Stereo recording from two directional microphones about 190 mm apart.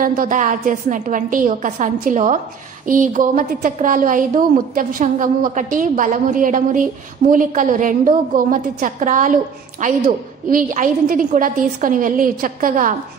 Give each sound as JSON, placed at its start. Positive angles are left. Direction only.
{"t": 0.0, "sound": "a woman's voice", "side_deg": -45}